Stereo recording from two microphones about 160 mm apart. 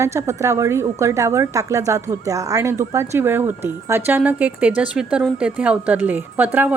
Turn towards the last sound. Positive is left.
turn(degrees=-10)  # may be behind; listen again after turning